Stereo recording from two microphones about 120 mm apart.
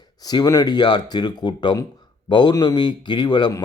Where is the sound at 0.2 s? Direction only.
30° left (ahead or behind).